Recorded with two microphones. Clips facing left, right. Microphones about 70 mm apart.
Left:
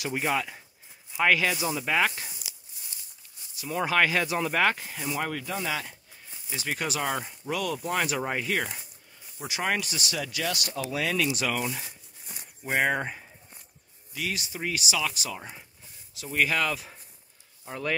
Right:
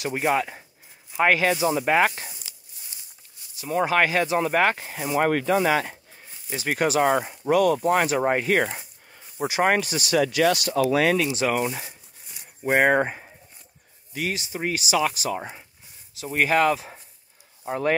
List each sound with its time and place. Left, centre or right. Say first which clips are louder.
0.1 s speech: right 5 dB; right
2.4 s a sound: left 1 dB; centre
3.6 s speech: right 4 dB; right
5.1 s speech: right 12 dB; right
6.7 s speech: right 9 dB; right
8.7 s a sound: right 5 dB; right
9.5 s speech: right 7 dB; right
10.2 s speech: right 11 dB; right
11.1 s speech: right 5 dB; right
14.3 s speech: right 3 dB; right